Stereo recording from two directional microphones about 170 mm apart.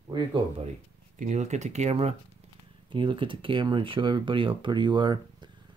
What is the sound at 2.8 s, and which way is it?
Speech, 30° right (ahead or behind).